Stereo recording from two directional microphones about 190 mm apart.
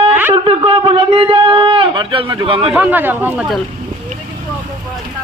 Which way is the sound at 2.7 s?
10° right (ahead or behind).